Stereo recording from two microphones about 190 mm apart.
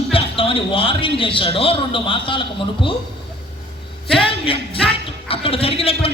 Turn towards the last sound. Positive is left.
turn(degrees=30)  # may be behind; listen again after turning